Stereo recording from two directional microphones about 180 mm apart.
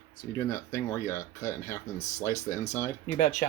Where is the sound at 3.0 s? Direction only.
40° left (ahead or behind).